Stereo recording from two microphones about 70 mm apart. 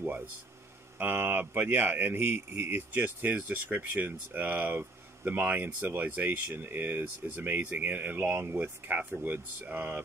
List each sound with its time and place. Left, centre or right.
0.9 s speech: right